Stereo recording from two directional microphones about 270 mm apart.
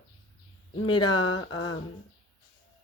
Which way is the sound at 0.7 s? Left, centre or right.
Centre.